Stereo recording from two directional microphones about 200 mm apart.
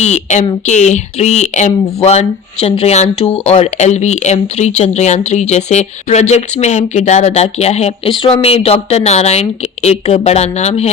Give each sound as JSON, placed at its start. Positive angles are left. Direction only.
{"t": 0.0, "sound": "speech", "side_deg": 35}